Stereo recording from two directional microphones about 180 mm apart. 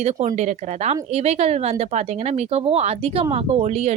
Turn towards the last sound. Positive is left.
turn(degrees=-35)  # may be behind; listen again after turning